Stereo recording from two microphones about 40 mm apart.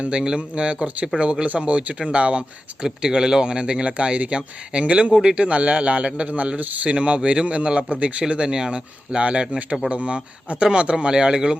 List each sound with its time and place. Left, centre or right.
0.0 s speech: right
2.8 s speech: centre
8.3 s speech: centre